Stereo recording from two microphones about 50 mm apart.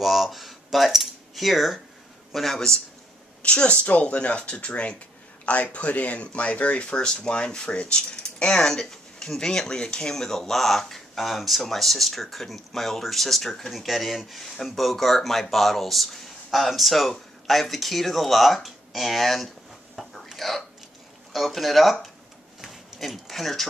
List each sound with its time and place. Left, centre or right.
0.0 s a man's voice: centre
3.4 s speech: left; by 19.5 s centre
20.0 s a sound: centre
21.3 s speech: centre
22.6 s a sound: centre
22.9 s speech: centre